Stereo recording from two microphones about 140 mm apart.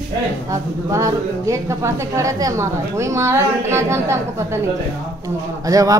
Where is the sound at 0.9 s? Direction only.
20° right (ahead or behind).